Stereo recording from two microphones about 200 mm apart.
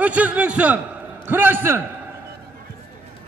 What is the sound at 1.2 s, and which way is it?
Speech, 10° right (ahead or behind).